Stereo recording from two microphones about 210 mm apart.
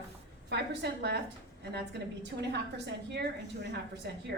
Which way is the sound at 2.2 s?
55° right (ahead or behind).